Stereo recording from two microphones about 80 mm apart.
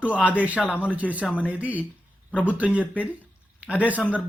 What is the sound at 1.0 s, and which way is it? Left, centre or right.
Speech, centre.